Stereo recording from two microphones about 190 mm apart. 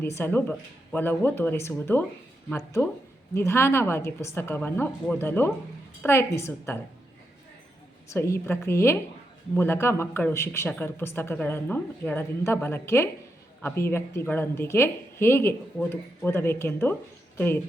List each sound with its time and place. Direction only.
0.0 s a woman's voice: 10° left (ahead or behind)
8.1 s a woman's voice: 15° left (ahead or behind)